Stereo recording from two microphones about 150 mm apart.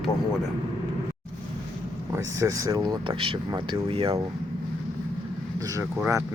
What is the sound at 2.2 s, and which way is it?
Speech, 20° right (ahead or behind).